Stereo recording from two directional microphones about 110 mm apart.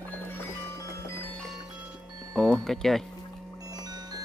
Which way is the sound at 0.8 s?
20° left (ahead or behind).